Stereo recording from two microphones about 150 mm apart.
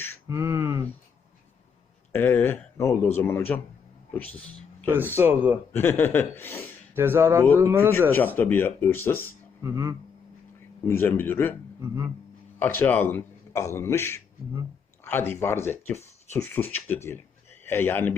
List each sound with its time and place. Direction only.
0.3 s speech: 20° right (ahead or behind)
2.1 s speech: 15° left (ahead or behind)
5.1 s speech: 15° right (ahead or behind)
5.7 s speech: 15° left (ahead or behind)
6.9 s speech: 15° right (ahead or behind)
8.4 s speech: 15° left (ahead or behind)
9.6 s speech: 20° right (ahead or behind)
10.8 s speech: 15° left (ahead or behind)
12.5 s a man's voice: 15° left (ahead or behind)